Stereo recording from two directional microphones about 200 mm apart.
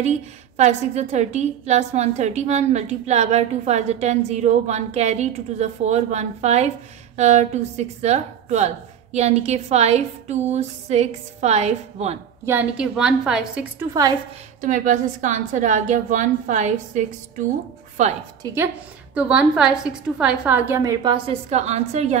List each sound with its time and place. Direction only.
0.6 s a woman's voice: 35° right (ahead or behind)
12.4 s a woman's voice: 5° right (ahead or behind)
14.6 s a woman's voice: 40° right (ahead or behind)
18.4 s a woman's voice: 10° right (ahead or behind)
21.0 s a woman's voice: 25° right (ahead or behind)